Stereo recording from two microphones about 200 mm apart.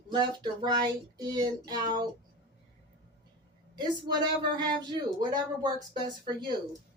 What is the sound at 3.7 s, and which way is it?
Speech, 20° right (ahead or behind).